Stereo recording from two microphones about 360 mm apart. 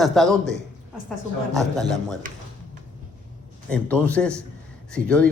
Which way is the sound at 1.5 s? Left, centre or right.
Centre.